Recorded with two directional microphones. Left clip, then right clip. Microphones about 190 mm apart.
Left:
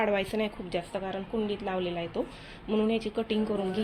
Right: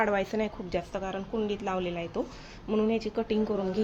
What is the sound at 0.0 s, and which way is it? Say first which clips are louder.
Speech: even; 5° right (ahead or behind).